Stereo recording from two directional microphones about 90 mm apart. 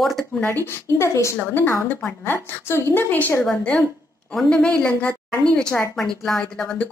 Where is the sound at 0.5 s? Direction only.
25° left (ahead or behind).